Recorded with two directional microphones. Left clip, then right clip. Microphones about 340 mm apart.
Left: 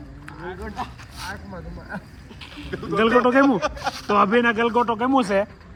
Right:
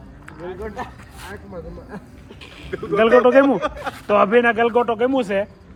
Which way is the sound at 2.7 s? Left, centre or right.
Left.